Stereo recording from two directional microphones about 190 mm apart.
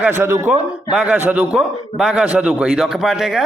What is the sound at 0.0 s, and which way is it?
A man's voice, 10° right (ahead or behind).